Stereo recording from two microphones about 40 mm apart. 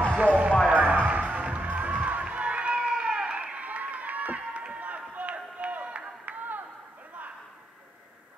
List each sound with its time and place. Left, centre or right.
0.1 s music: right
2.7 s run: right
3.3 s crowd: right